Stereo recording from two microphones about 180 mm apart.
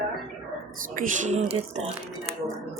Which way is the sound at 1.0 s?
45° right (ahead or behind).